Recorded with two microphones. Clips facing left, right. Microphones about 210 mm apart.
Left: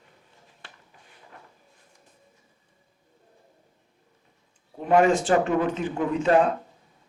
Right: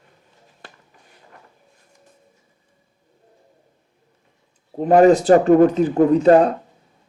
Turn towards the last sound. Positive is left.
turn(degrees=-40)  # may be behind; listen again after turning